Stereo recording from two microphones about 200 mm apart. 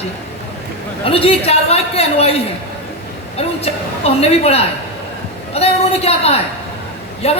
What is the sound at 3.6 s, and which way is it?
A woman's voice, 30° left (ahead or behind).